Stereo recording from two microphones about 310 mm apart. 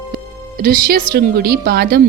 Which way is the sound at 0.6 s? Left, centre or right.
Right.